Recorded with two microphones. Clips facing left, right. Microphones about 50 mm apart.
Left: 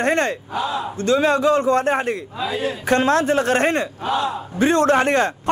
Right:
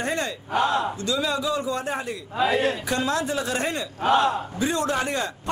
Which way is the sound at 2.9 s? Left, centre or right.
Left.